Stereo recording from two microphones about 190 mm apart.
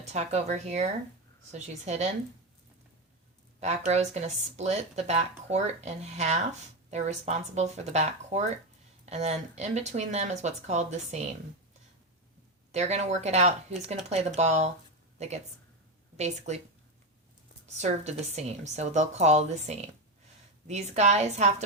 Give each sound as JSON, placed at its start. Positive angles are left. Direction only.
{"t": 0.0, "sound": "speech", "side_deg": -35}
{"t": 3.6, "sound": "speech", "side_deg": -35}
{"t": 12.7, "sound": "speech", "side_deg": -35}
{"t": 17.7, "sound": "speech", "side_deg": -35}